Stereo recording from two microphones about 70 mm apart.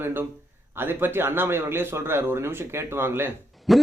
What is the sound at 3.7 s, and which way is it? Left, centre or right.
Speech, centre.